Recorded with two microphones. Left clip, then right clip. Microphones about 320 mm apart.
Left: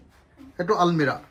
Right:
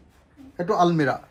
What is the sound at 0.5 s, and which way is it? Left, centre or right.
Speech, centre.